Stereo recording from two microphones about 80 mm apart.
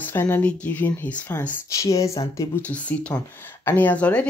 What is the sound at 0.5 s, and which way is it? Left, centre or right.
Speech, centre.